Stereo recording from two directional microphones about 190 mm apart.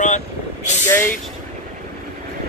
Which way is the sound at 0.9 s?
10° left (ahead or behind).